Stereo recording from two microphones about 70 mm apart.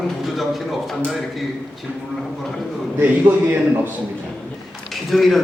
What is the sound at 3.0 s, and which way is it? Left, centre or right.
Speech, right.